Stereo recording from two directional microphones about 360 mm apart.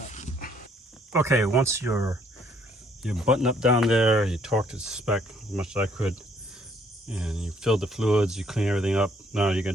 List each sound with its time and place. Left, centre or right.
0.1 s dog: centre
1.1 s speech: centre